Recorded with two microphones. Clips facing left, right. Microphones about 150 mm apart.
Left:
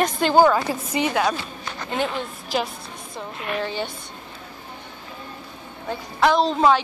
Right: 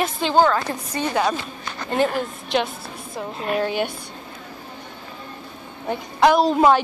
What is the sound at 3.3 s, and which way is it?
Speech, 40° right (ahead or behind).